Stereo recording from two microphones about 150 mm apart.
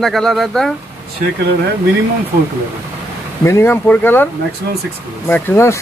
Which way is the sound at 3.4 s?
15° left (ahead or behind).